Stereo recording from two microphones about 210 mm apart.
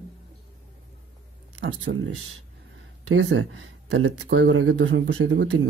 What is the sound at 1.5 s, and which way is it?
Speech, 65° right (ahead or behind).